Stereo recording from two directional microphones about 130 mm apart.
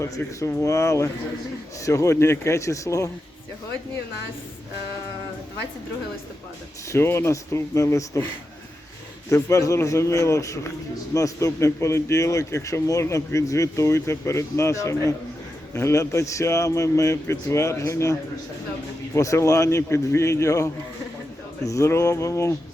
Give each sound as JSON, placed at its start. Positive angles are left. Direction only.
{"t": 0.0, "sound": "speech", "side_deg": 20}
{"t": 6.9, "sound": "speech", "side_deg": 20}
{"t": 9.3, "sound": "speech", "side_deg": 20}